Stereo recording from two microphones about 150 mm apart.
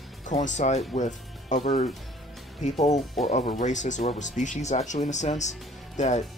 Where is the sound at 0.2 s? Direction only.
55° left (ahead or behind).